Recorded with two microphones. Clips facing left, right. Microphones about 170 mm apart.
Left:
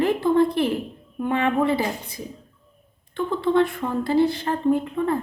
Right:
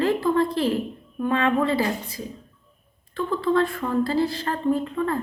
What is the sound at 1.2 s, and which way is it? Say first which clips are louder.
Speech: even; 20° left (ahead or behind).